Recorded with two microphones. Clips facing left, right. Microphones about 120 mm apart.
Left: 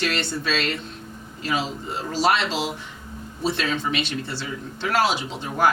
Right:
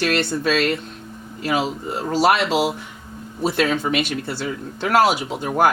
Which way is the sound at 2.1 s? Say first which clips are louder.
Right 5 dB; 55° right (ahead or behind).